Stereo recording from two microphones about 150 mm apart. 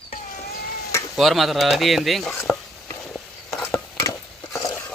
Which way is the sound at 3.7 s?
20° left (ahead or behind).